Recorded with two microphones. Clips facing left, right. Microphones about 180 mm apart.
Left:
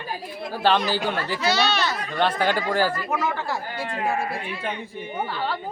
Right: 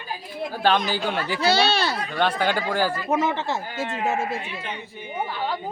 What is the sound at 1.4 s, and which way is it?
Speech, 30° right (ahead or behind).